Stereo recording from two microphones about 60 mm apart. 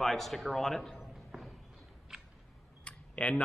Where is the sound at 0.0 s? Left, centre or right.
Centre.